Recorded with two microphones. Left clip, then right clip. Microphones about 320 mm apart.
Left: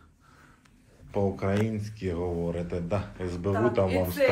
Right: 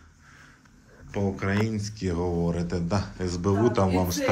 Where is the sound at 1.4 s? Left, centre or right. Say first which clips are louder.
Right 1 dB; centre.